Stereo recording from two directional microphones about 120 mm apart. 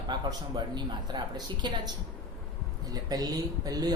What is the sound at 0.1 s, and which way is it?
Speech, 35° right (ahead or behind).